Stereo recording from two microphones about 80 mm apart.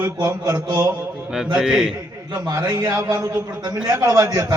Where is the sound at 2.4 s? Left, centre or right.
Right.